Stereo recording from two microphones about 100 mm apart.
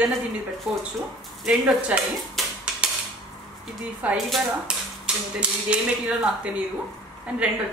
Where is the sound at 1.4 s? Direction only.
10° right (ahead or behind).